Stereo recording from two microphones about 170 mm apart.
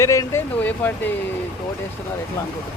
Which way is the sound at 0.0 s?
15° left (ahead or behind).